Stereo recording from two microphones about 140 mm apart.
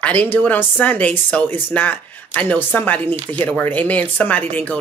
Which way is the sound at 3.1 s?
40° right (ahead or behind).